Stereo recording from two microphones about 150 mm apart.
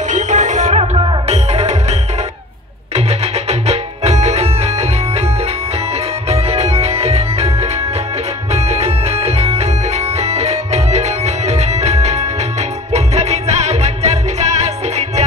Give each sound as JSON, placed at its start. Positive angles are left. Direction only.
{"t": 0.1, "sound": "music", "side_deg": -55}
{"t": 3.1, "sound": "music", "side_deg": -45}
{"t": 6.2, "sound": "music", "side_deg": -45}